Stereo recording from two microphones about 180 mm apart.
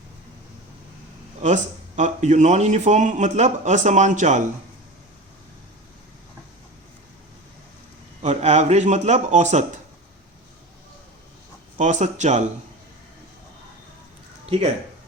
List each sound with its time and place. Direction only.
1.4 s speech: 40° right (ahead or behind)
8.2 s speech: 40° right (ahead or behind)
11.8 s speech: 40° right (ahead or behind)